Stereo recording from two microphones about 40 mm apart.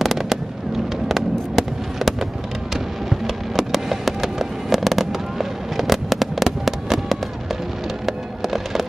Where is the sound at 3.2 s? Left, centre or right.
Centre.